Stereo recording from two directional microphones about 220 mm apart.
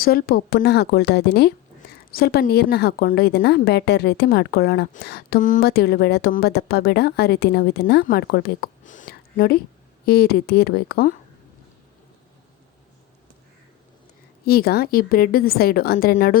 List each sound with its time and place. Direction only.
0.0 s a woman's voice: 45° left (ahead or behind)
14.4 s a woman's voice: 45° left (ahead or behind)